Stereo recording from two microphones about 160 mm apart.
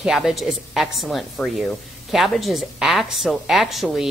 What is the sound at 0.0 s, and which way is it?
Speech, 5° right (ahead or behind).